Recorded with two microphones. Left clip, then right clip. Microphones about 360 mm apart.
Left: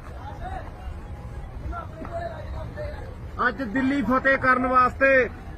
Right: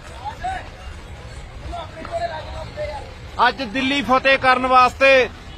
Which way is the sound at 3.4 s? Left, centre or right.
Right.